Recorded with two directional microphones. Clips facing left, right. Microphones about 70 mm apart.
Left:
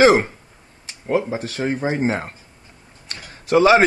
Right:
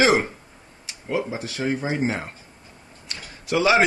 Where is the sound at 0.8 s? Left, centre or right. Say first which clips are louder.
Left 5 dB; left.